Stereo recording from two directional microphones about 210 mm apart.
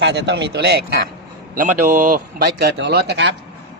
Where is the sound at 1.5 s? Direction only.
40° right (ahead or behind).